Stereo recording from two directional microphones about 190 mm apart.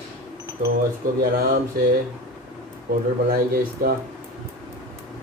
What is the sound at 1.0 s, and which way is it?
Speech, 50° right (ahead or behind).